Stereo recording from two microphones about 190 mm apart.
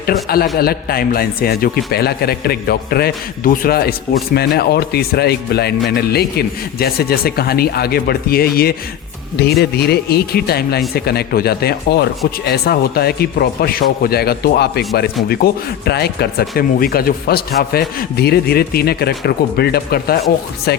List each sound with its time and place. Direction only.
0.0 s a man's voice: 50° left (ahead or behind)